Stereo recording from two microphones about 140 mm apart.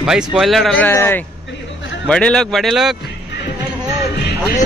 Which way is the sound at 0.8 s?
15° left (ahead or behind).